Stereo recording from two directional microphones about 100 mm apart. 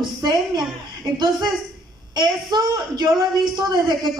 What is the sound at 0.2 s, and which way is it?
Speech, 40° right (ahead or behind).